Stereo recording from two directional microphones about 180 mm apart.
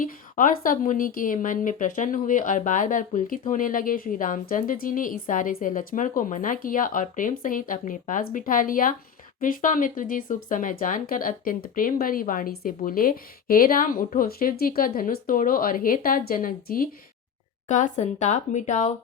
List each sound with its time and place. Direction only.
0.0 s a woman's voice: 50° left (ahead or behind)
17.7 s speech: 40° left (ahead or behind)